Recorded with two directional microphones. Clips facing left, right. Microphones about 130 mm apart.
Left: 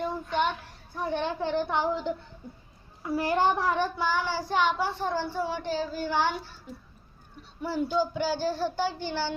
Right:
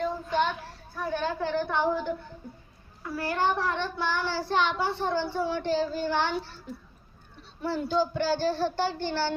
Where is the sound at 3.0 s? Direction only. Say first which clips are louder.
Left 3 dB; 20° left (ahead or behind).